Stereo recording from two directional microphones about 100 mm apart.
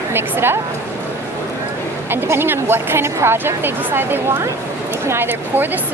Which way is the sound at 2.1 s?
20° right (ahead or behind).